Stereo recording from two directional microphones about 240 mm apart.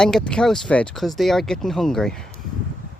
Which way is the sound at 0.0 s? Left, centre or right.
Centre.